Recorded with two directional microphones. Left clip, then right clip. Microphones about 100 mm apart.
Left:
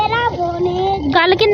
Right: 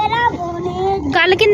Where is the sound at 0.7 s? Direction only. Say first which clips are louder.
Right 1 dB; 35° left (ahead or behind).